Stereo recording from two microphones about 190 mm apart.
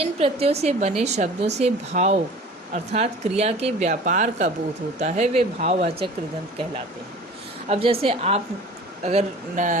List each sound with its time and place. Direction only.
0.0 s a woman's voice: 30° right (ahead or behind)
7.7 s a woman's voice: 30° right (ahead or behind)